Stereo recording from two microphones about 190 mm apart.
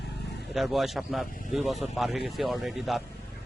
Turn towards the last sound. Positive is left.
turn(degrees=0)  # may be behind; listen again after turning